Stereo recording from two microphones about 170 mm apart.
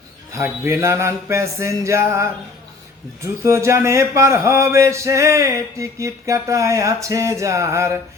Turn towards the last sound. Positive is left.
turn(degrees=-15)  # may be behind; listen again after turning